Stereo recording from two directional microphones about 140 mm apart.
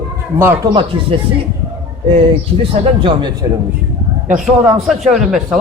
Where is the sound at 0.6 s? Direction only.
25° right (ahead or behind).